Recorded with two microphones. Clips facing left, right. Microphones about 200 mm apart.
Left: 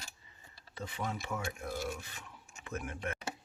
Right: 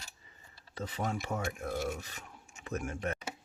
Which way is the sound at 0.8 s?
40° right (ahead or behind).